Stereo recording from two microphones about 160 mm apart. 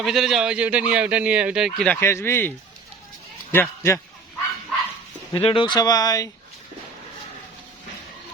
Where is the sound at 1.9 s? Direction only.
15° left (ahead or behind).